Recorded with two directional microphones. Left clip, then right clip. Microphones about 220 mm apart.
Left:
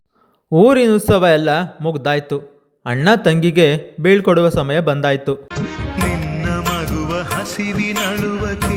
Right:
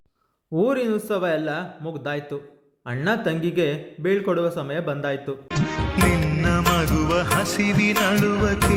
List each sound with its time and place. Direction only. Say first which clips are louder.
0.5 s a man's voice: left 11 dB; 40° left (ahead or behind)
5.5 s music: left 1 dB; centre (ahead or behind)